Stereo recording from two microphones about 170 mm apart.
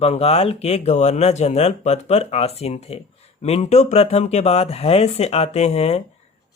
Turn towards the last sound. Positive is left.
turn(degrees=40)  # may be behind; listen again after turning